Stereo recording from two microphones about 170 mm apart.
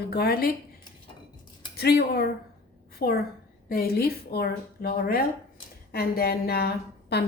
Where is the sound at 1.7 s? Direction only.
70° left (ahead or behind).